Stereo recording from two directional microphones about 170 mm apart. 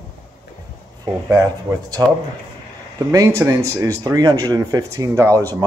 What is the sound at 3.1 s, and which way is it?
Speech, 20° right (ahead or behind).